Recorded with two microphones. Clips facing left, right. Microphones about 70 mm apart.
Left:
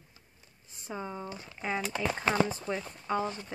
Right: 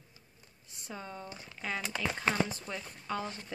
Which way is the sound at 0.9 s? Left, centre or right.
Centre.